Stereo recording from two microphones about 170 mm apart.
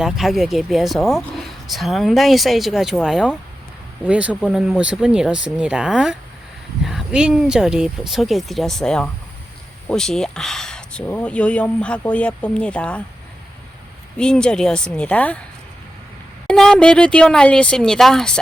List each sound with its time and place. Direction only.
0.0 s speech: centre (ahead or behind)
14.2 s speech: 5° left (ahead or behind)
16.5 s speech: 5° left (ahead or behind)